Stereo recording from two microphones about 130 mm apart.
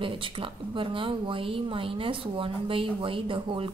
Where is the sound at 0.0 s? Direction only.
45° right (ahead or behind).